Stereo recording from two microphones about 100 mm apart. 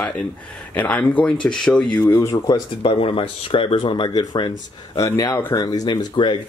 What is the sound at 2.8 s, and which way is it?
Speech, 70° left (ahead or behind).